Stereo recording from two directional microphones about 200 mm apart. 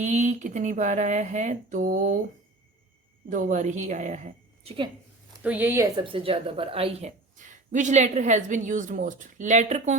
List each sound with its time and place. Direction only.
0.0 s speech: 35° right (ahead or behind)
3.2 s speech: 40° right (ahead or behind)
5.4 s speech: 10° right (ahead or behind); by 10.0 s 35° right (ahead or behind)